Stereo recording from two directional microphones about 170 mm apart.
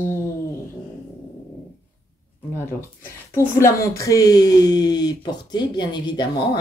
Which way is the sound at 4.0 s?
20° left (ahead or behind).